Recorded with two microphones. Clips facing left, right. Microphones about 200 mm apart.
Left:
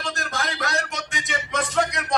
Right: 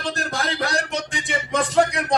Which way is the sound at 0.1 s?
30° right (ahead or behind).